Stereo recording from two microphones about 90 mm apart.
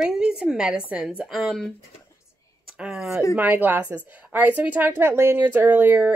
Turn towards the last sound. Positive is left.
turn(degrees=-15)  # may be behind; listen again after turning